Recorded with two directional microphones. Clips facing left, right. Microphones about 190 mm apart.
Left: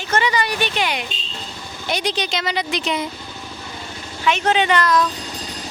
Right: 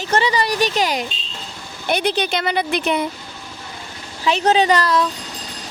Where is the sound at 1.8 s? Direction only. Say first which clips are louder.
Right 4 dB; 55° right (ahead or behind).